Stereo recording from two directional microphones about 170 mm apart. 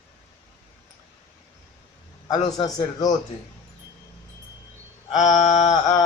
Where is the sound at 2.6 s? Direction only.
20° left (ahead or behind).